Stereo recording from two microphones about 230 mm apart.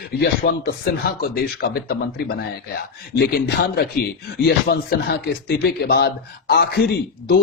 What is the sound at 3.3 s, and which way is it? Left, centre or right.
A man's voice, left.